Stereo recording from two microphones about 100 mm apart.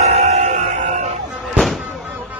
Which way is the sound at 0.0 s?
90° right.